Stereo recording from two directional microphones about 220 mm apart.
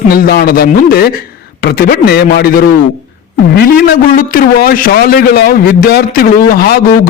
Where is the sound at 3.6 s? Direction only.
45° left (ahead or behind).